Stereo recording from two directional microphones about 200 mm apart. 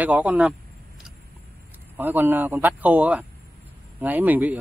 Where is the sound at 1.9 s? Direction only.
10° right (ahead or behind).